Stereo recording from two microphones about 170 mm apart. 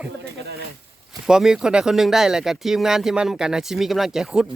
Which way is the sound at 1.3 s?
5° right (ahead or behind).